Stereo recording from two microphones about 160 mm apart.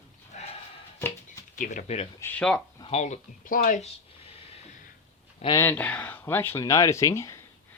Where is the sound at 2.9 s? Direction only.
45° left (ahead or behind).